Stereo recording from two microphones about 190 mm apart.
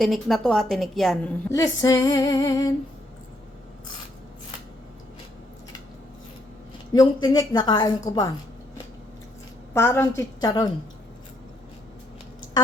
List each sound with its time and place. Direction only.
0.0 s a woman's voice: centre (ahead or behind)
1.5 s a woman's voice: 20° left (ahead or behind)
6.9 s a woman's voice: 20° left (ahead or behind)
9.7 s a woman's voice: 10° left (ahead or behind)